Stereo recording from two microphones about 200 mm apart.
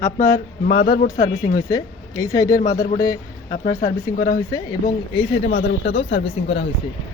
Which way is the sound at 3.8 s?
45° left (ahead or behind).